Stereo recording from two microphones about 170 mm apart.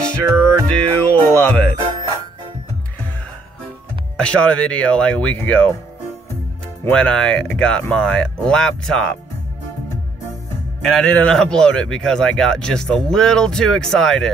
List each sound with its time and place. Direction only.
0.0 s music: 5° left (ahead or behind)
4.2 s speech: 5° left (ahead or behind)
6.8 s a man's voice: 5° left (ahead or behind)
10.8 s a man's voice: 5° left (ahead or behind)